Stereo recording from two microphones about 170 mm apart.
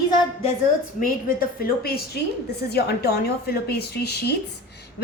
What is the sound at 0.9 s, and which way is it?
A woman's voice, 55° left (ahead or behind).